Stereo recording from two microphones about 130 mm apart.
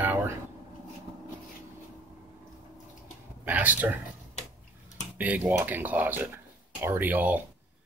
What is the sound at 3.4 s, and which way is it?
Speech, 15° right (ahead or behind).